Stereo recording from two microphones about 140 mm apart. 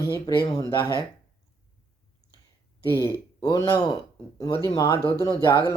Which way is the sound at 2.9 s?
20° left (ahead or behind).